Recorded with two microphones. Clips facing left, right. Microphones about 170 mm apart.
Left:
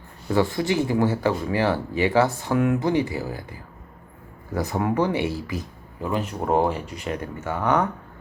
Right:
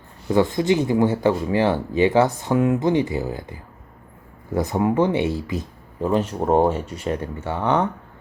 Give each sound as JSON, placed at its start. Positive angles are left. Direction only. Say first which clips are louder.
{"t": 0.3, "sound": "speech", "louder": "right 4 dB", "side_deg": -20}